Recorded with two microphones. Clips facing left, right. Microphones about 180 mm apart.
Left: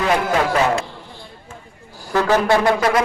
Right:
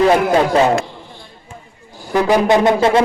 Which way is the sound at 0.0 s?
30° right (ahead or behind).